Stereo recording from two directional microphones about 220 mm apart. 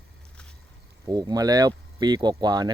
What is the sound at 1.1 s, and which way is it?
Speech, 20° right (ahead or behind).